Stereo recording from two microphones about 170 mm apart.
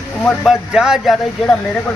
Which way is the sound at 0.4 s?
5° right (ahead or behind).